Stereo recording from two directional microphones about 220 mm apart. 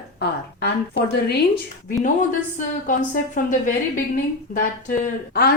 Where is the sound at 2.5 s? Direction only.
35° left (ahead or behind).